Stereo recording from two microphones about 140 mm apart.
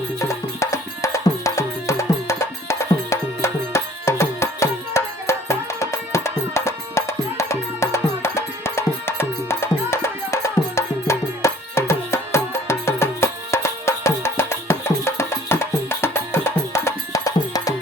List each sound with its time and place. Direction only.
0.2 s music: 20° left (ahead or behind)